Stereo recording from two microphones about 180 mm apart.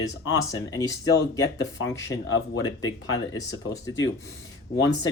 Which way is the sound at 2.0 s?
85° left.